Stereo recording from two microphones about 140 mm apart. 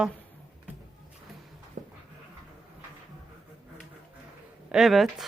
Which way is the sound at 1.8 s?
65° right (ahead or behind).